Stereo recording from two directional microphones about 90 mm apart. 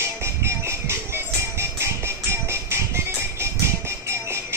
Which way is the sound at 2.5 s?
30° right (ahead or behind).